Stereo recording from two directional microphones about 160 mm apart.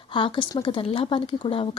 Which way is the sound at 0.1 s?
30° left (ahead or behind).